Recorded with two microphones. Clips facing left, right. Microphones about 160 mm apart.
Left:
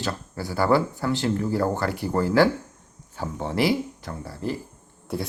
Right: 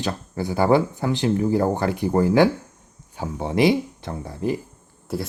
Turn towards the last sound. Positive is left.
turn(degrees=0)  # may be behind; listen again after turning